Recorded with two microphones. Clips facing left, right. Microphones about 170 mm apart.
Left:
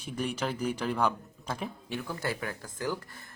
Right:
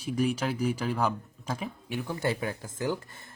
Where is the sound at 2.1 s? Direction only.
25° right (ahead or behind).